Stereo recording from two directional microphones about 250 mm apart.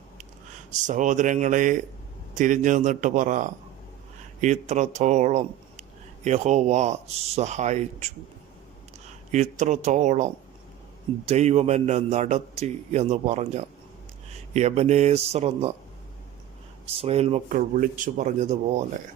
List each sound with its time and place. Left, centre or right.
0.7 s a man's voice: right
9.3 s a man's voice: right
11.3 s a man's voice: right
16.8 s a man's voice: right